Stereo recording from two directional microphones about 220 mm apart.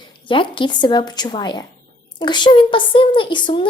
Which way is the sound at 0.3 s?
20° left (ahead or behind).